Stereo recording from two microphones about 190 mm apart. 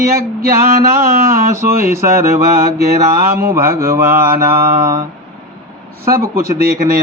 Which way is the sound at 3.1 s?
50° right (ahead or behind).